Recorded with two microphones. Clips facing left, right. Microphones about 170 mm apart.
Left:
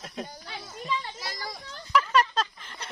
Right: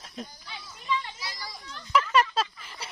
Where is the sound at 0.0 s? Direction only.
70° left (ahead or behind).